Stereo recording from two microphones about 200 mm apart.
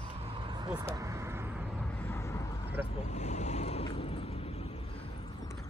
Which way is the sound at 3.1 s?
35° left (ahead or behind).